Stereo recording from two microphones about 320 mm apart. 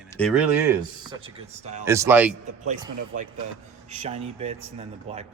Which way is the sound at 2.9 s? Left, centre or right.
Right.